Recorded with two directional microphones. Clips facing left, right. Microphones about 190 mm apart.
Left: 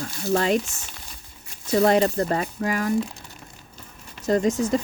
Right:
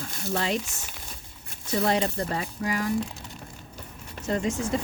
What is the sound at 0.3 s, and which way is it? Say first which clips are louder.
Speech: left 6 dB; 50° left (ahead or behind).